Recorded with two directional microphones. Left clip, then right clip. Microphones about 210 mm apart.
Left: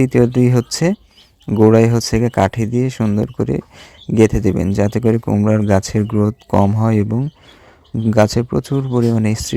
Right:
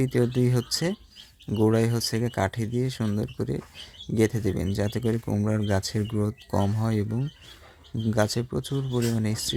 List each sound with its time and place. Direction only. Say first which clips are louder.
0.0 s speech: left 11 dB; 40° left (ahead or behind)